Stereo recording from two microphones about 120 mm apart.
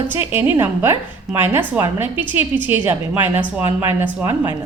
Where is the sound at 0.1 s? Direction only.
15° right (ahead or behind).